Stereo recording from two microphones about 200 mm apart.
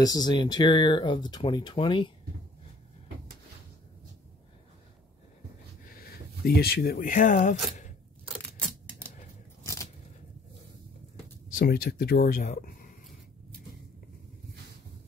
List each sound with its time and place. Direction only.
0.0 s speech: 20° left (ahead or behind)
5.9 s speech: 50° left (ahead or behind)
8.4 s scissors: 10° left (ahead or behind)
11.5 s speech: 50° left (ahead or behind)